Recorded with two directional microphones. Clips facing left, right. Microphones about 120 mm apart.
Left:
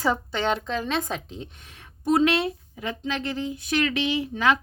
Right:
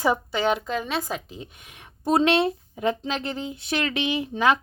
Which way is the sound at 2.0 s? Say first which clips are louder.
Right 1 dB; 30° right (ahead or behind).